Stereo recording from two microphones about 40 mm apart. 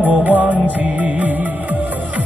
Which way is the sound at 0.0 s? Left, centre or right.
Right.